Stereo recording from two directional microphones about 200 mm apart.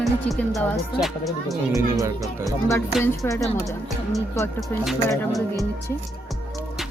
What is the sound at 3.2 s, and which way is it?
Speech, 10° left (ahead or behind).